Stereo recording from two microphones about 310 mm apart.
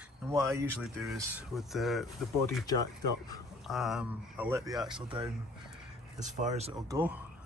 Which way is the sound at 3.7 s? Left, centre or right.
Centre.